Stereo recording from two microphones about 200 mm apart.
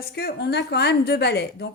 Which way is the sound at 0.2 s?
55° left (ahead or behind).